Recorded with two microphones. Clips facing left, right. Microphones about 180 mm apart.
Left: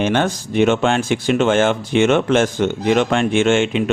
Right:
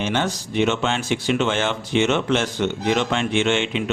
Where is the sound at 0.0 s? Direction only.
55° left (ahead or behind).